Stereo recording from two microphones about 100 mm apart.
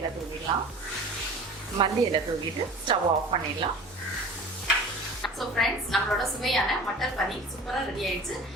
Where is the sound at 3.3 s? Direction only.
60° right (ahead or behind).